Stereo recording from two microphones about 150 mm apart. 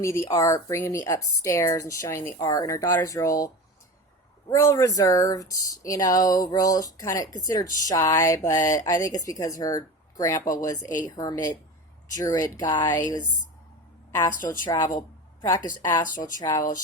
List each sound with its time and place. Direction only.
0.0 s speech: 20° left (ahead or behind)
14.6 s a woman's voice: 25° left (ahead or behind)